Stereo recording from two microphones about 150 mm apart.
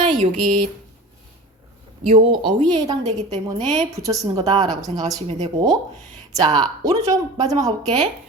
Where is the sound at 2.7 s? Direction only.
25° right (ahead or behind).